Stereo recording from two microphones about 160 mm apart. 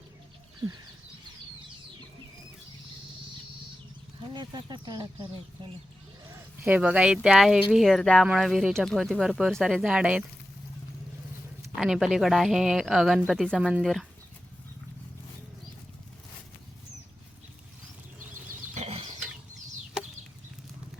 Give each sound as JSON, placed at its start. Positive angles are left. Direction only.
{"t": 4.4, "sound": "speech", "side_deg": -25}
{"t": 6.3, "sound": "speech", "side_deg": -10}
{"t": 11.8, "sound": "speech", "side_deg": -5}
{"t": 18.7, "sound": "a sound", "side_deg": -40}